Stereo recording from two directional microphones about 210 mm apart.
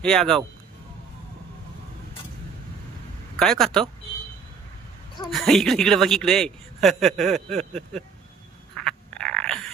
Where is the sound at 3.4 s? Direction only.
Centre (ahead or behind).